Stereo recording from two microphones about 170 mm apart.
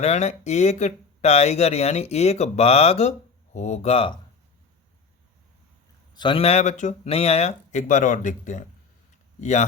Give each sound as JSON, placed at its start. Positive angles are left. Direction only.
{"t": 0.0, "sound": "speech", "side_deg": 40}
{"t": 6.1, "sound": "speech", "side_deg": 30}